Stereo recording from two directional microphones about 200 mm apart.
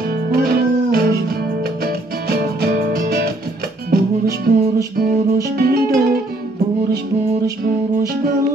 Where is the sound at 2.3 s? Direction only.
50° right (ahead or behind).